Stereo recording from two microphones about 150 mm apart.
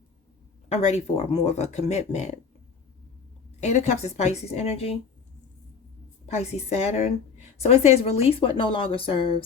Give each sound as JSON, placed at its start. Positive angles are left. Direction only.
{"t": 0.7, "sound": "a woman's voice", "side_deg": 50}
{"t": 3.6, "sound": "a woman's voice", "side_deg": 50}
{"t": 6.3, "sound": "a woman's voice", "side_deg": 45}